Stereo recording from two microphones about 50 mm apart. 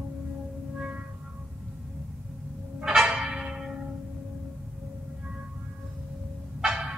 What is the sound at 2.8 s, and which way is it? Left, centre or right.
Church bell, centre.